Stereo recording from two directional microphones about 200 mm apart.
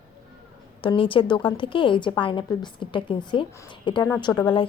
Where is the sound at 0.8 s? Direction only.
25° left (ahead or behind).